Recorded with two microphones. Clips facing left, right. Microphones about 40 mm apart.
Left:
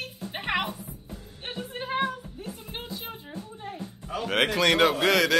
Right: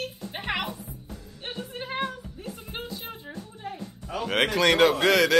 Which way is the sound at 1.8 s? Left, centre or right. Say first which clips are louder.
Left 3 dB; centre.